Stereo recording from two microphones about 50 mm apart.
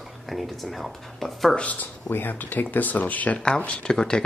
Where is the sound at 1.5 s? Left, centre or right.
Left.